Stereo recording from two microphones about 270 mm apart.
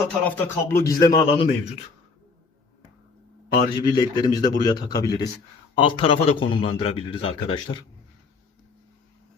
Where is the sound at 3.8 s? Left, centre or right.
Centre.